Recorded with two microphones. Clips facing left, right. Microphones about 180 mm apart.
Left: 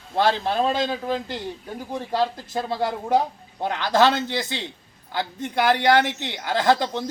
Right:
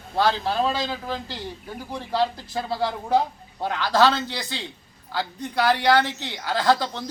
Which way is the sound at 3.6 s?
20° left (ahead or behind).